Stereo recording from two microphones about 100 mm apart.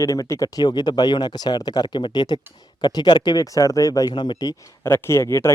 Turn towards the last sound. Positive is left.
turn(degrees=30)  # may be behind; listen again after turning